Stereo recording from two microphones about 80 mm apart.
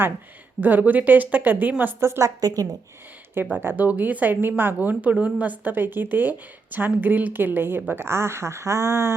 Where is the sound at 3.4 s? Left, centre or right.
Right.